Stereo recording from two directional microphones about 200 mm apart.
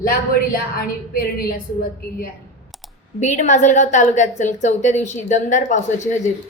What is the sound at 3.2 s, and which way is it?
Speech, 35° left (ahead or behind).